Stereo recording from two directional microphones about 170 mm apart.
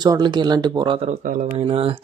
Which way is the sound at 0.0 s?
25° right (ahead or behind).